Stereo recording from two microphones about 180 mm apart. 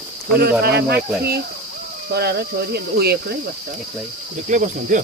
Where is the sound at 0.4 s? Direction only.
60° right (ahead or behind).